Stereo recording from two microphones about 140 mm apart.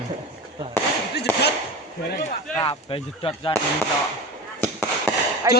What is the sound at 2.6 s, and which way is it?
Speech, 40° left (ahead or behind).